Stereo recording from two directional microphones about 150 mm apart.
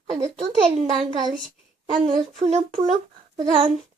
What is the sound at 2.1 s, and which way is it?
A child's voice, 45° right (ahead or behind).